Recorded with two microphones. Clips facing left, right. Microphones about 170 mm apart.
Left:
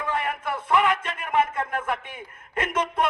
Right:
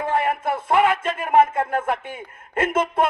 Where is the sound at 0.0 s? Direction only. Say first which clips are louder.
Right 6 dB; 45° right (ahead or behind).